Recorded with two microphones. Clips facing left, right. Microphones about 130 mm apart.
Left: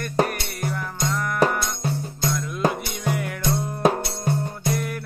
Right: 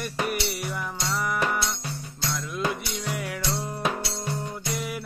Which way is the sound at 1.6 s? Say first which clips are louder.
Left 5 dB; 45° left (ahead or behind).